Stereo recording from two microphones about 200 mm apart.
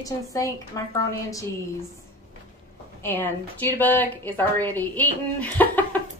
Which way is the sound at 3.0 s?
10° left (ahead or behind).